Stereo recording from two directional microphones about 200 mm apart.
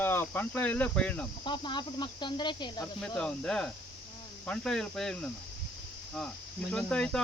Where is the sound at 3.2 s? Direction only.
5° left (ahead or behind).